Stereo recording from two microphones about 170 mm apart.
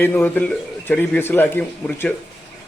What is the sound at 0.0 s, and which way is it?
A man's voice, 10° left (ahead or behind).